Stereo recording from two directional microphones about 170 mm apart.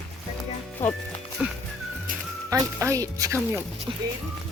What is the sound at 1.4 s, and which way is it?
Music, 5° right (ahead or behind).